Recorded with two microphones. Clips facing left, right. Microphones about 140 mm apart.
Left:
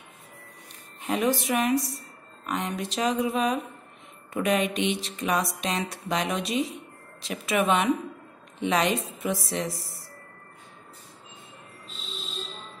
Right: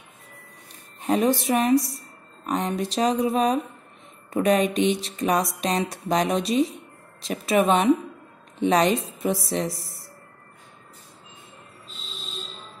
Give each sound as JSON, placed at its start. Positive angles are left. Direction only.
{"t": 1.0, "sound": "a woman's voice", "side_deg": -35}